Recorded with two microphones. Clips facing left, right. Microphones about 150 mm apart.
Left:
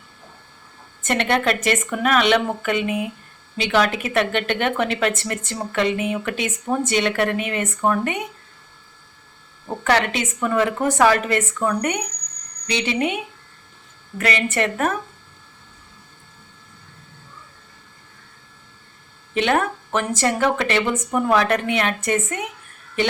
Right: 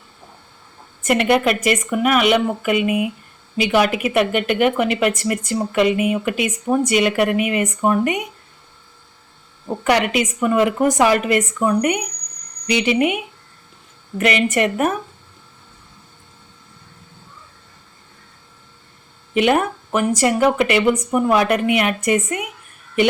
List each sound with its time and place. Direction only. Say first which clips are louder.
1.0 s speech: right 4 dB; 10° right (ahead or behind)
9.8 s speech: right 3 dB; 10° right (ahead or behind)
19.3 s speech: right 3 dB; 10° right (ahead or behind)